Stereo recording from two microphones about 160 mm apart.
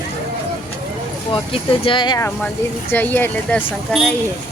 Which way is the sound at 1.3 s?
35° left (ahead or behind).